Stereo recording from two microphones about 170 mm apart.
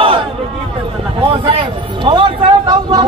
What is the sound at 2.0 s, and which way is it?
A man's voice, 25° right (ahead or behind).